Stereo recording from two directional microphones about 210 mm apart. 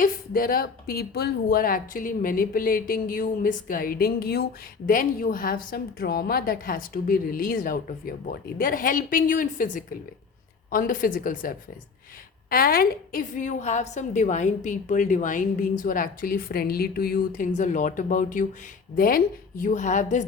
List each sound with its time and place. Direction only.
0.0 s a woman's voice: 45° left (ahead or behind)